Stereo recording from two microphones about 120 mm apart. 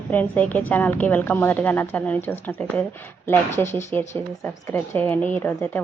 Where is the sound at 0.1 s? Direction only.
15° left (ahead or behind).